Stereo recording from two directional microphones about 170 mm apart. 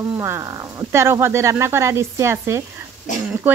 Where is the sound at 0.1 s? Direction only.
15° right (ahead or behind).